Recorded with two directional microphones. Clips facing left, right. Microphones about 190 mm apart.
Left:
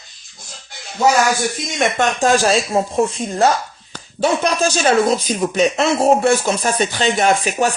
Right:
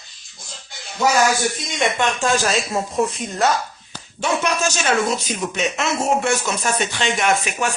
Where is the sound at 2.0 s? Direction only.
40° left (ahead or behind).